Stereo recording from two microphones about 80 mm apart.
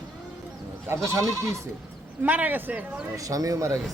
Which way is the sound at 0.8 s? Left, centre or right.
Right.